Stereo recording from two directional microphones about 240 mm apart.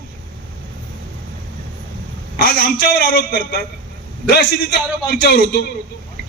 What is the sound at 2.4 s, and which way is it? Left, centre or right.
A man's voice, left.